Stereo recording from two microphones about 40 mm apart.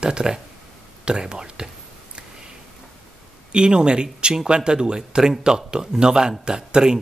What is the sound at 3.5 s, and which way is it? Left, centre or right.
Speech, right.